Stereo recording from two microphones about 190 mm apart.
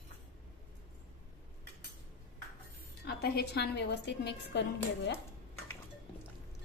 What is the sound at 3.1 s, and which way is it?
A woman's voice, 55° left (ahead or behind).